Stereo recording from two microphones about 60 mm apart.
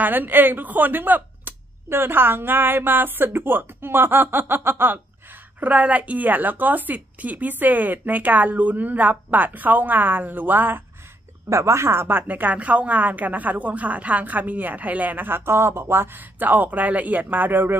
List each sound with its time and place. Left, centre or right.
0.0 s speech: right
5.6 s speech: right
11.4 s speech: right